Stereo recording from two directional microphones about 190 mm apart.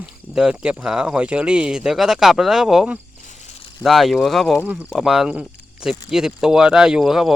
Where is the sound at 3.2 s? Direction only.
40° left (ahead or behind).